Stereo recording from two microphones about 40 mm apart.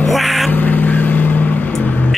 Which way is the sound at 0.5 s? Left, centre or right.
Left.